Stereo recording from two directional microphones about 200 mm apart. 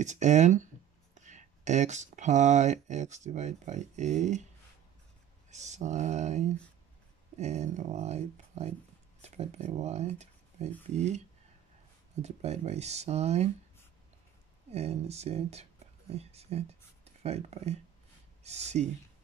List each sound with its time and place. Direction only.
0.0 s speech: 35° right (ahead or behind)
5.5 s speech: 35° right (ahead or behind)
14.7 s speech: 30° right (ahead or behind)